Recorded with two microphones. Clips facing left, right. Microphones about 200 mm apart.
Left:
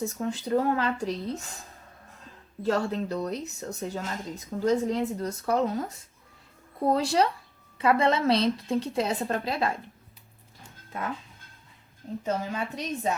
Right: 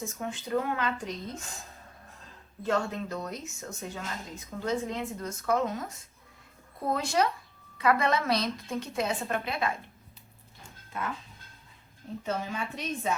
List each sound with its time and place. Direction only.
0.0 s speech: 40° left (ahead or behind)
2.6 s speech: 35° left (ahead or behind)
6.9 s speech: 35° left (ahead or behind)
12.2 s speech: 40° left (ahead or behind)